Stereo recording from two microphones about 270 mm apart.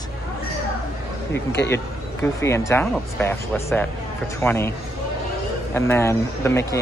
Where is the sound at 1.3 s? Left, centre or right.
Left.